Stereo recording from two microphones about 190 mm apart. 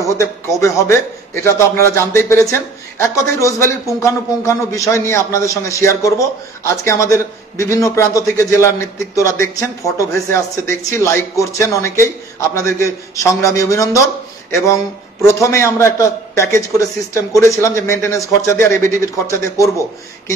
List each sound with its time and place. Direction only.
0.6 s a man's voice: 15° left (ahead or behind)
15.2 s a man's voice: 15° left (ahead or behind)